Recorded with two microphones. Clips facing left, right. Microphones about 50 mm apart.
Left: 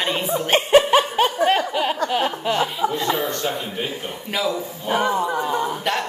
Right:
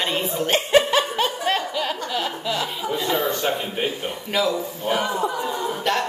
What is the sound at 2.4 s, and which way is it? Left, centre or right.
Chuckle, left.